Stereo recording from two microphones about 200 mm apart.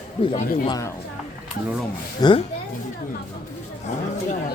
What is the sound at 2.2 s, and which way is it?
Speech, 25° left (ahead or behind).